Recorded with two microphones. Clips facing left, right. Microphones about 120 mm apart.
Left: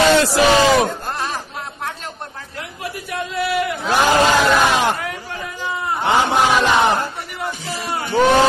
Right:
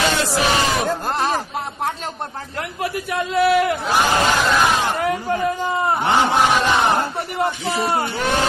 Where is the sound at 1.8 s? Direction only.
40° right (ahead or behind).